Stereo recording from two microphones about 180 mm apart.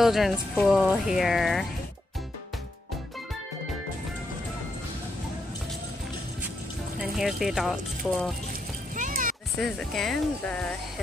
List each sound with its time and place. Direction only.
0.0 s speech: centre (ahead or behind)
7.0 s speech: centre (ahead or behind)
8.9 s music: 45° right (ahead or behind)
9.6 s speech: centre (ahead or behind)